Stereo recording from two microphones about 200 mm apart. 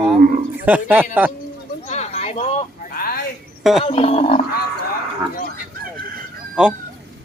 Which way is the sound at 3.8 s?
30° left (ahead or behind).